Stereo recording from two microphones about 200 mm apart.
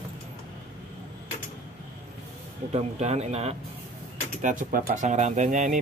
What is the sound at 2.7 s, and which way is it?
Speech, 35° right (ahead or behind).